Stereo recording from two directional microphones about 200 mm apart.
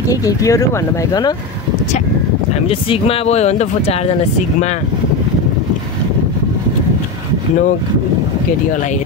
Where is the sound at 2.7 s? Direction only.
30° left (ahead or behind).